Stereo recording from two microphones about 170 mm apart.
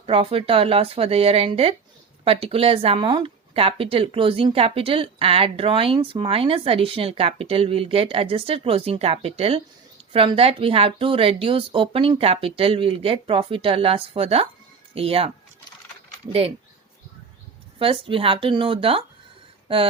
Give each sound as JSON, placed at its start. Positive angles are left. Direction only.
{"t": 0.0, "sound": "speech", "side_deg": -35}
{"t": 17.7, "sound": "speech", "side_deg": -30}
{"t": 19.6, "sound": "a sound", "side_deg": -35}